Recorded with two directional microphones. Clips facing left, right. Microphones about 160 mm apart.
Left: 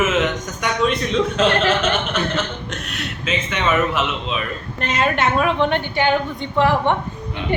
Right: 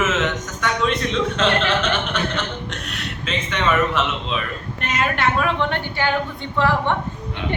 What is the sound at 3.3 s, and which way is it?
Speech, 10° left (ahead or behind).